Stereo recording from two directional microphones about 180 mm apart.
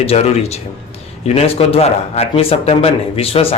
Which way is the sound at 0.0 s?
35° left (ahead or behind).